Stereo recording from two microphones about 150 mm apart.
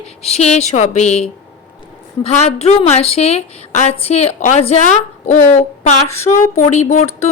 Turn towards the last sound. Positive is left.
turn(degrees=50)  # may be behind; listen again after turning